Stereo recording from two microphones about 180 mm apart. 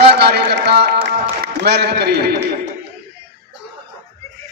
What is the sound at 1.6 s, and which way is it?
Speech, 65° right (ahead or behind).